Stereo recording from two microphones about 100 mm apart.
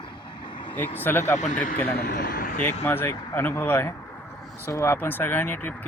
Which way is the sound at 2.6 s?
20° left (ahead or behind).